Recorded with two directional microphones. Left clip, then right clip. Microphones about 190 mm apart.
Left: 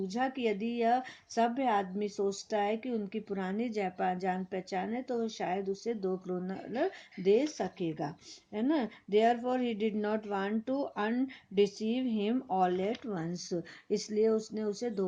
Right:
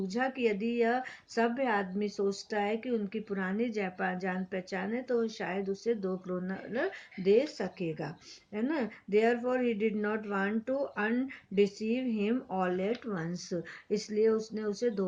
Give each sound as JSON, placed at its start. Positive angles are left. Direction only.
{"t": 0.1, "sound": "a woman's voice", "side_deg": 45}